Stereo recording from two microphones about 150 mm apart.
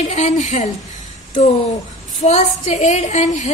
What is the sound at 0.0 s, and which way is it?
Speech, 50° left (ahead or behind).